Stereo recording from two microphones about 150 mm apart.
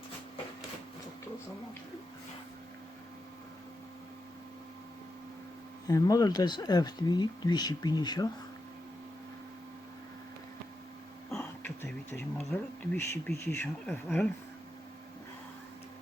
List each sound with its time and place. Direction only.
5.9 s speech: 20° left (ahead or behind)
11.3 s a sound: 15° left (ahead or behind)
12.5 s speech: 10° left (ahead or behind)